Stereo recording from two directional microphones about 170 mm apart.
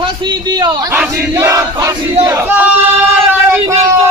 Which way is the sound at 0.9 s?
15° right (ahead or behind).